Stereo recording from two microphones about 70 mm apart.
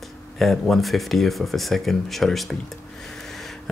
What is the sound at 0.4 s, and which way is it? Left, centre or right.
Speech, centre.